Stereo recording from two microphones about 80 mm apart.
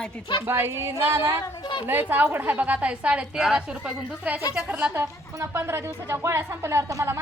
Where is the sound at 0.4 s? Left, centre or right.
Right; by 4.9 s centre.